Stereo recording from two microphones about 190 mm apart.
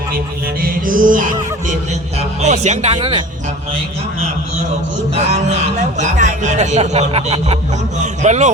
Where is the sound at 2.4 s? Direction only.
35° right (ahead or behind).